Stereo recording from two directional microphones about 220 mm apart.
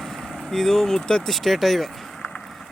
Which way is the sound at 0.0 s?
Centre (ahead or behind).